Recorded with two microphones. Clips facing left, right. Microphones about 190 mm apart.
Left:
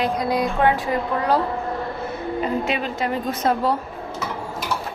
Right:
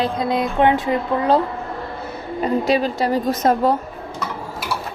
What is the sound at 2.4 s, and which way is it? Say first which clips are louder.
A woman's voice: right 7 dB; 35° right (ahead or behind).